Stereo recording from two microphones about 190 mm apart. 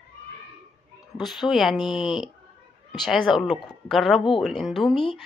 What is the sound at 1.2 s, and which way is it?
A woman's voice, centre (ahead or behind).